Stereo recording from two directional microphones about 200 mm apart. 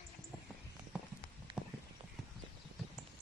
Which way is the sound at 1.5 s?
25° right (ahead or behind).